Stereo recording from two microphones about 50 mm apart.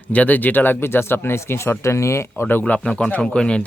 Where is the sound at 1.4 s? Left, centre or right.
Left.